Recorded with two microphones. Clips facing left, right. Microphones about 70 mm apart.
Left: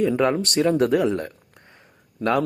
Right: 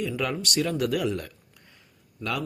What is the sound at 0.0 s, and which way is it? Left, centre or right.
Speech, left.